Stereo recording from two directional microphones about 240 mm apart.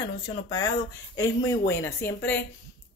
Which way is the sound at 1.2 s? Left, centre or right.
Centre.